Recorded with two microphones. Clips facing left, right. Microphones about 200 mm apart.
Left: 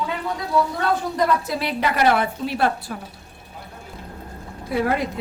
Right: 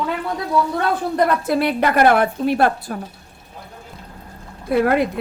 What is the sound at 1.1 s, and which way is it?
A woman's voice, 55° right (ahead or behind).